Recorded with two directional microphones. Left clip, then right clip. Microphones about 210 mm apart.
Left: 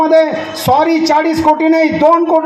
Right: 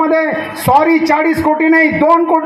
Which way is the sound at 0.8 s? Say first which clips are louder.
Right 1 dB; 35° right (ahead or behind).